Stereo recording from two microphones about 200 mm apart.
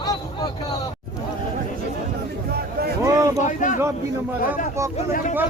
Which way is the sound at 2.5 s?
50° right (ahead or behind).